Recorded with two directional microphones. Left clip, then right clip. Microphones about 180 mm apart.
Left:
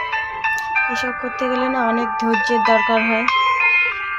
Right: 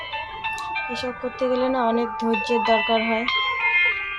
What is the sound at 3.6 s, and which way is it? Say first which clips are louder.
Music: left 3 dB; 15° left (ahead or behind).